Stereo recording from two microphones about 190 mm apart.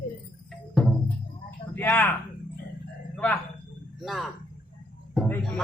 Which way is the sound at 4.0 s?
Centre (ahead or behind).